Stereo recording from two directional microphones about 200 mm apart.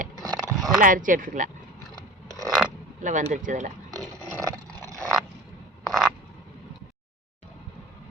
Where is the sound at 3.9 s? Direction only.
15° right (ahead or behind).